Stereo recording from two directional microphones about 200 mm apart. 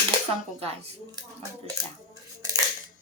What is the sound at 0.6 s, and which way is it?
Speech, 30° right (ahead or behind).